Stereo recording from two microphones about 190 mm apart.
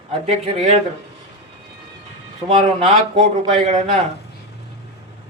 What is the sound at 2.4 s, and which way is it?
Speech, 30° right (ahead or behind).